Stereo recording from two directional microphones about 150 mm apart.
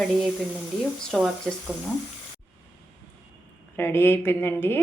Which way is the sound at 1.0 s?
5° left (ahead or behind).